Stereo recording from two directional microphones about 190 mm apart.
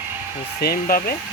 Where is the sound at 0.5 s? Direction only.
55° left (ahead or behind).